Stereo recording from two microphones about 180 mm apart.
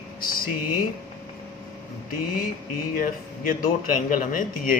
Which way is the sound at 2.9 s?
50° left (ahead or behind).